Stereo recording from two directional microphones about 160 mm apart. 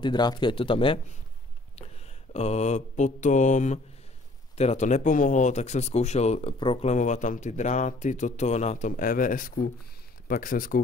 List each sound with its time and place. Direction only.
0.0 s speech: 30° left (ahead or behind)
2.3 s speech: 45° left (ahead or behind)
6.6 s speech: 35° left (ahead or behind)
6.9 s speech: 50° left (ahead or behind)